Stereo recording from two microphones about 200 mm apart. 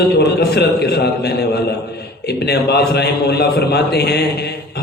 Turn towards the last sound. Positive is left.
turn(degrees=55)  # may be behind; listen again after turning